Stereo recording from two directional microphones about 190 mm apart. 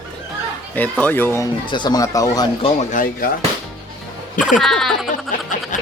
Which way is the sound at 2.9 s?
45° left (ahead or behind).